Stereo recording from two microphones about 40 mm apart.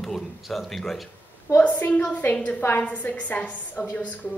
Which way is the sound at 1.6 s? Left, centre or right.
Left.